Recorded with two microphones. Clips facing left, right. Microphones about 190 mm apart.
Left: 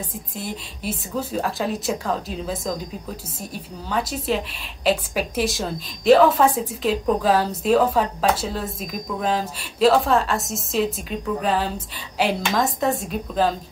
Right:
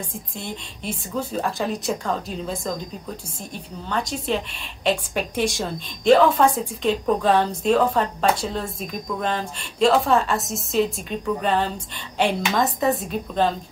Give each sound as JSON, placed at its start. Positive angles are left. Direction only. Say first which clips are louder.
{"t": 0.4, "sound": "a woman's voice", "louder": "left 3 dB", "side_deg": 5}
{"t": 3.8, "sound": "a woman's voice", "louder": "left 1 dB", "side_deg": 5}